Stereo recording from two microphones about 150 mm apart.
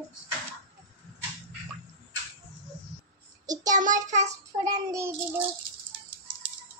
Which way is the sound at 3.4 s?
25° right (ahead or behind).